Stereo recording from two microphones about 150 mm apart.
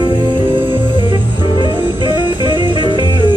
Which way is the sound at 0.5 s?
35° right (ahead or behind).